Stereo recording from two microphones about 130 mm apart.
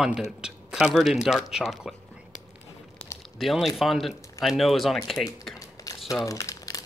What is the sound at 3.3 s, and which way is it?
Speech, centre (ahead or behind).